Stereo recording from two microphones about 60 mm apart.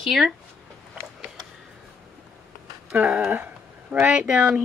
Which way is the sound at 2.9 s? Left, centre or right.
Right.